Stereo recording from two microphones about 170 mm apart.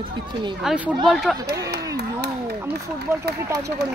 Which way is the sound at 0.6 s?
5° right (ahead or behind).